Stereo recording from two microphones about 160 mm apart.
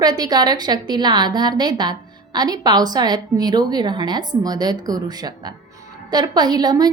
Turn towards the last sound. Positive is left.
turn(degrees=-25)  # may be behind; listen again after turning